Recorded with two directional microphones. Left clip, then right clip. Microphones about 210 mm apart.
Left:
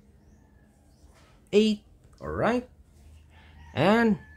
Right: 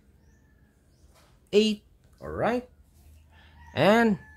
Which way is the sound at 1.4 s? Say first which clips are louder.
Even; 5° right (ahead or behind).